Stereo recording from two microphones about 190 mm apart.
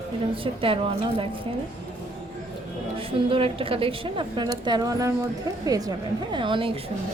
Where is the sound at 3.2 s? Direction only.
30° right (ahead or behind).